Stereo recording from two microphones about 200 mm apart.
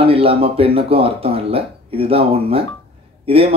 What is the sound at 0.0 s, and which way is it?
Speech, 30° right (ahead or behind).